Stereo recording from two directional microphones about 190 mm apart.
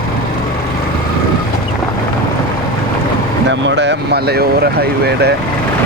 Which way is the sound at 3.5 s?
70° right (ahead or behind).